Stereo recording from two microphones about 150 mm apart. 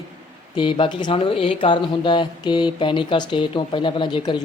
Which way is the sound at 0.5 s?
35° left (ahead or behind).